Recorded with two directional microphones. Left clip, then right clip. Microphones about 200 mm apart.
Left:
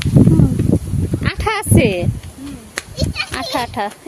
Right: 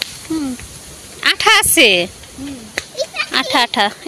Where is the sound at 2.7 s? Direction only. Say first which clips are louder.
Right 2 dB; 55° left (ahead or behind).